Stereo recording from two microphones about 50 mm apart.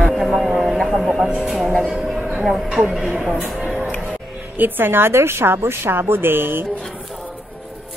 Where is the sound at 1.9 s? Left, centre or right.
Centre.